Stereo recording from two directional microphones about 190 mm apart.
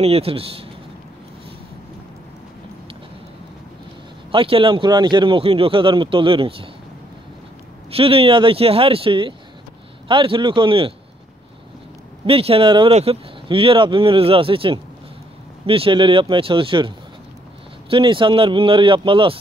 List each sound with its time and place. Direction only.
0.0 s speech: 30° right (ahead or behind)
4.3 s speech: 25° right (ahead or behind)
7.9 s speech: 30° right (ahead or behind)
12.3 s speech: 30° right (ahead or behind)